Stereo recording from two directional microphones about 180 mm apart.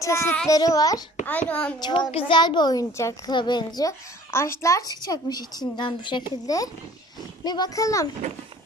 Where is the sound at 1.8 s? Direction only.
25° left (ahead or behind).